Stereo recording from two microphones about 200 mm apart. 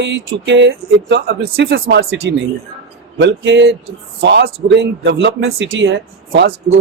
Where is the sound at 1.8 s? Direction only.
80° right; by 5.1 s 60° right (ahead or behind).